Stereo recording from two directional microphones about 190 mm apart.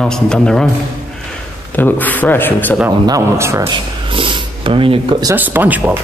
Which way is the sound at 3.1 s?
15° right (ahead or behind).